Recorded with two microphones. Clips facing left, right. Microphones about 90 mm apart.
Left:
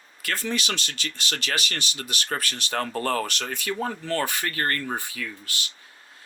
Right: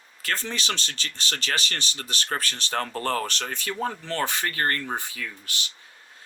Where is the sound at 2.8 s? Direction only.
35° left (ahead or behind).